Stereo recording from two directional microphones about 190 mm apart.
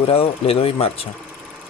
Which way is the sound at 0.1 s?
30° left (ahead or behind).